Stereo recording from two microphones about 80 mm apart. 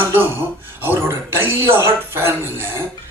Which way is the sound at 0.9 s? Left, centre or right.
Right.